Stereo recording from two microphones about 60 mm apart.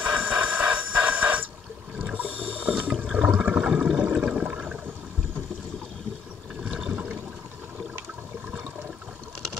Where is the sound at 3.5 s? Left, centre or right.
Centre.